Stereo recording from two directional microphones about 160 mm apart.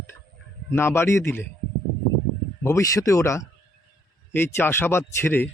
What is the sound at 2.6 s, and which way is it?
Speech, 20° left (ahead or behind).